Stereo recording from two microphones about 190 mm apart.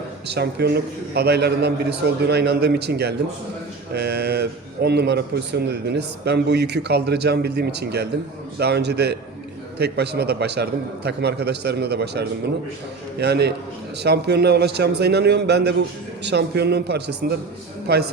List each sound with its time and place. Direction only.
0.3 s a man's voice: 60° right (ahead or behind)